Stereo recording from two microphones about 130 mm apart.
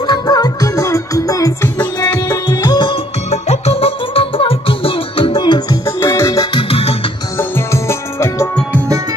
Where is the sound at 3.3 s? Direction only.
55° left (ahead or behind); by 5.8 s 35° left (ahead or behind).